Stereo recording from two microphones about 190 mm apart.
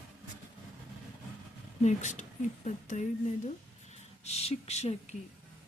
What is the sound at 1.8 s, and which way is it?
Speech, 40° left (ahead or behind).